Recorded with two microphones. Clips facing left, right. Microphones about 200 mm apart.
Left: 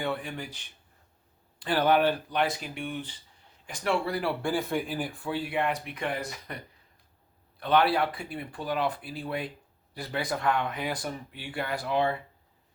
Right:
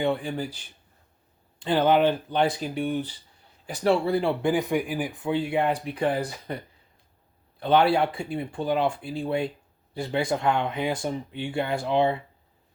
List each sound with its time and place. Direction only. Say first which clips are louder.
0.0 s speech: right 6 dB; 30° right (ahead or behind)
1.5 s speech: right 3 dB; 20° right (ahead or behind)
7.6 s speech: right 4 dB; 25° right (ahead or behind)